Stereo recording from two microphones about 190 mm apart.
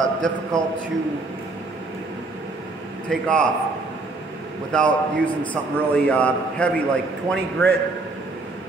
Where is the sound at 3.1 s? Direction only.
5° left (ahead or behind).